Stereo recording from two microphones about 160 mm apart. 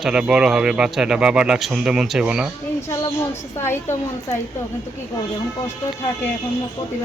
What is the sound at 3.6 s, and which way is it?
Speech, 15° left (ahead or behind).